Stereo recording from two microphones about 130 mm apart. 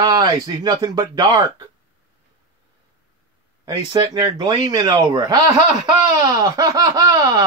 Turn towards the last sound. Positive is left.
turn(degrees=-30)  # may be behind; listen again after turning